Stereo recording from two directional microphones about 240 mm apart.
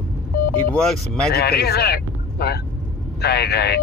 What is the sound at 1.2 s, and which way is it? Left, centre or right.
Speech, left.